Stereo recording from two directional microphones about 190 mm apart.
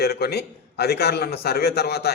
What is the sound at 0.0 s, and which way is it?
A man's voice, 55° left (ahead or behind).